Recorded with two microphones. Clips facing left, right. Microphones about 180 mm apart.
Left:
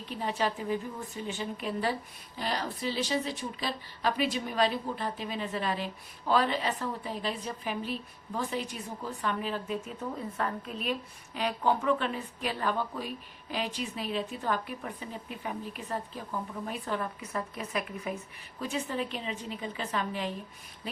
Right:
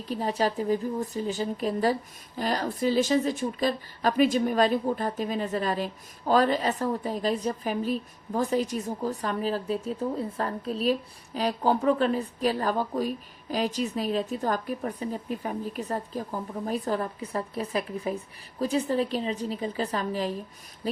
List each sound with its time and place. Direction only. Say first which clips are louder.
0.0 s a woman's voice: right 5 dB; 40° right (ahead or behind)